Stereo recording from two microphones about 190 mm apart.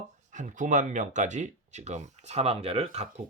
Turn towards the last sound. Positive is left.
turn(degrees=-30)  # may be behind; listen again after turning